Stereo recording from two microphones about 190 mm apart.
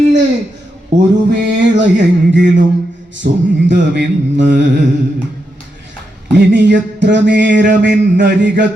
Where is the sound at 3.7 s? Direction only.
65° right (ahead or behind).